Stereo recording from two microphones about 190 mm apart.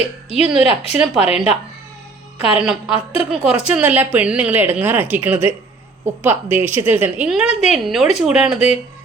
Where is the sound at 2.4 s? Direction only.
5° right (ahead or behind).